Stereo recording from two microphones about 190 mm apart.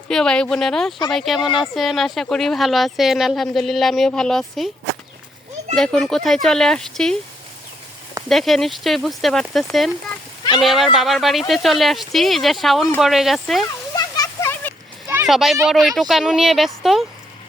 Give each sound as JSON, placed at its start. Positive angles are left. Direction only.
{"t": 0.1, "sound": "a woman's voice", "side_deg": 5}
{"t": 5.7, "sound": "a woman's voice", "side_deg": 5}
{"t": 8.3, "sound": "a woman's voice", "side_deg": 0}
{"t": 13.9, "sound": "a sound", "side_deg": 20}
{"t": 15.3, "sound": "a woman's voice", "side_deg": 0}